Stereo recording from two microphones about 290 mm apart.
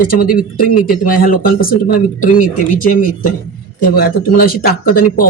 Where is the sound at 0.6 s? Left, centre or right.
Left.